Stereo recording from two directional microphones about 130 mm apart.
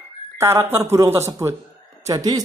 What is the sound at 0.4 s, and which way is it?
Speech, 20° right (ahead or behind).